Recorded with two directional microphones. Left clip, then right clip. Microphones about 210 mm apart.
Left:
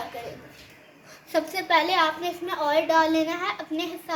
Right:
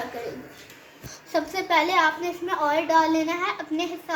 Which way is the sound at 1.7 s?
20° left (ahead or behind).